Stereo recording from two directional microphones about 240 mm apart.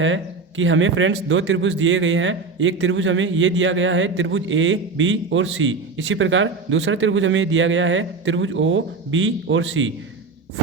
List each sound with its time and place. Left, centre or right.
0.0 s a man's voice: right